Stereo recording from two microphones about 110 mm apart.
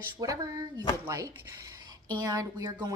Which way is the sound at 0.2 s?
35° right (ahead or behind).